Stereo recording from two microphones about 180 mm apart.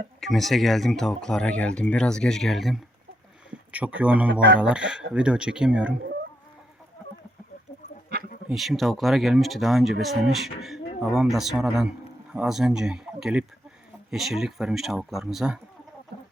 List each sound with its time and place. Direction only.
0.2 s speech: centre (ahead or behind)
4.3 s speech: 90° right
4.6 s speech: 5° right (ahead or behind)
8.4 s speech: centre (ahead or behind)